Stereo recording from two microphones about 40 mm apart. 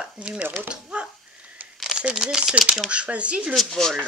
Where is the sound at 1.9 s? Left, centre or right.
Centre.